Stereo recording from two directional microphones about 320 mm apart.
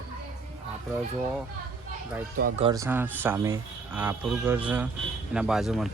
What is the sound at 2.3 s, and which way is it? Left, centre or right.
Speech, right.